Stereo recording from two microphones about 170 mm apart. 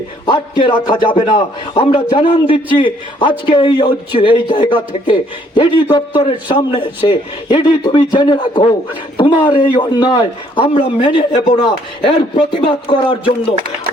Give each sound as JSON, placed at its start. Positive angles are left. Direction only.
{"t": 0.3, "sound": "a man's voice", "side_deg": 30}